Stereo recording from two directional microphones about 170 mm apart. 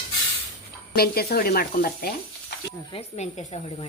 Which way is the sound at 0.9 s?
65° left (ahead or behind).